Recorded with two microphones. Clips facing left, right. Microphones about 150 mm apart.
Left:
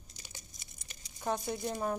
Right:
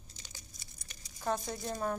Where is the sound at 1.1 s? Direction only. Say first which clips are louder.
Even; 20° left (ahead or behind).